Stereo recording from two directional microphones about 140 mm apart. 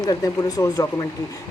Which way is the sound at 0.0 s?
30° left (ahead or behind).